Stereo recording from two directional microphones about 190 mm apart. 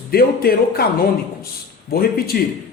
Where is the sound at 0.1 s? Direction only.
55° left (ahead or behind).